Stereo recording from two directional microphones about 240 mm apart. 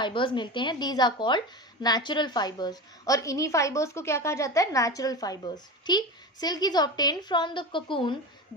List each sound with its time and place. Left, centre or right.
0.0 s a woman's voice: centre